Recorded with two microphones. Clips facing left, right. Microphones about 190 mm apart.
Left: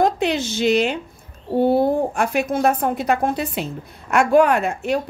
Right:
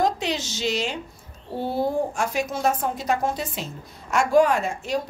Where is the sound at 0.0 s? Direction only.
55° left (ahead or behind).